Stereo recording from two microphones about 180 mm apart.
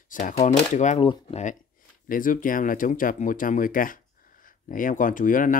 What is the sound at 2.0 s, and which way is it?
Speech, 50° left (ahead or behind).